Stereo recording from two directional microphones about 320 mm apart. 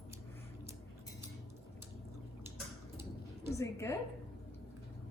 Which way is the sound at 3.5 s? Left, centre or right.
Centre.